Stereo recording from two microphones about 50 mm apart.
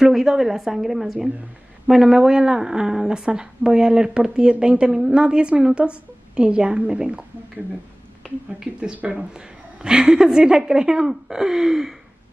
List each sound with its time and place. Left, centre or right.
0.0 s a woman's voice: centre
8.9 s speech: right
9.3 s a woman's voice: centre